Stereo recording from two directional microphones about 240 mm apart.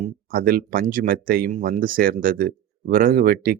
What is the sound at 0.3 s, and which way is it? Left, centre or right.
Speech, right.